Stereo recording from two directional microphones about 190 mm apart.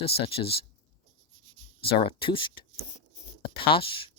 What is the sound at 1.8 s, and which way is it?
Speech, 30° left (ahead or behind).